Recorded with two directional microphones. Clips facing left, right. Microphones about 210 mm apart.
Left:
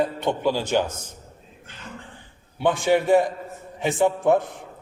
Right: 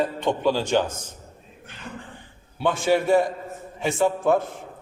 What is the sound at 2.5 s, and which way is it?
A man's voice, 15° left (ahead or behind).